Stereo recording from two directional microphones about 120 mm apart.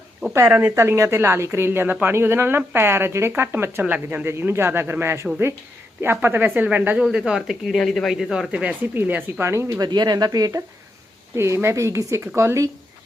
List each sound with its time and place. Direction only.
0.3 s speech: 20° right (ahead or behind)